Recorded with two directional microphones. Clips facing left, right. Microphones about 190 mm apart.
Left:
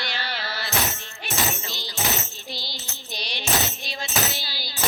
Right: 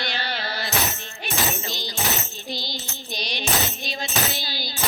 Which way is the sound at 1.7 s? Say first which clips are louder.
Right 1 dB; 15° right (ahead or behind).